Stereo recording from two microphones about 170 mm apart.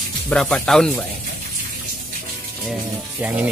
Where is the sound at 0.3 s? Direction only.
5° left (ahead or behind).